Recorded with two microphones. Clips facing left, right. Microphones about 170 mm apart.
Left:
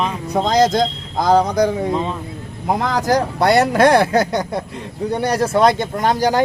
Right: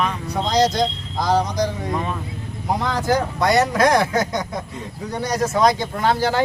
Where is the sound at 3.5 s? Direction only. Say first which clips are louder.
Left 4 dB; 60° left (ahead or behind).